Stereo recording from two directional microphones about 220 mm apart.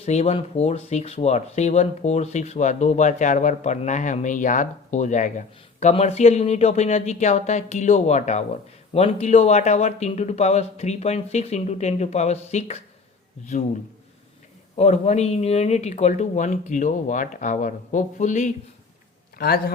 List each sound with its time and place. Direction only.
0.0 s speech: 30° left (ahead or behind)
14.8 s speech: 30° left (ahead or behind)
19.4 s a man's voice: 45° left (ahead or behind)